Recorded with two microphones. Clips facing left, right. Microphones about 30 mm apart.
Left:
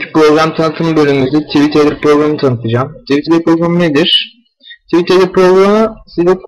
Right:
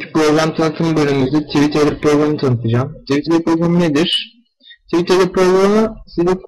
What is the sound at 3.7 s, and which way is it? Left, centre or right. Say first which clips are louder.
Speech: left 5 dB; left.